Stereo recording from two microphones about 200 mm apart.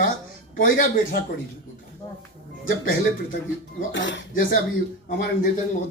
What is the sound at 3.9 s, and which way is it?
Speech, 65° left (ahead or behind).